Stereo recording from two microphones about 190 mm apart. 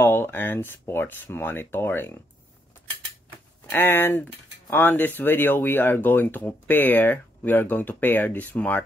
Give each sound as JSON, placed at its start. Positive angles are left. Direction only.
{"t": 0.0, "sound": "speech", "side_deg": 10}
{"t": 3.7, "sound": "speech", "side_deg": 10}